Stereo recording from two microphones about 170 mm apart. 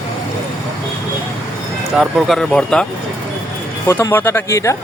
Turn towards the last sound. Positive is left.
turn(degrees=20)  # may be behind; listen again after turning